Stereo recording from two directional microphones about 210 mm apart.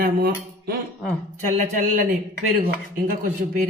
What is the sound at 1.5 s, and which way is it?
Speech, 40° right (ahead or behind).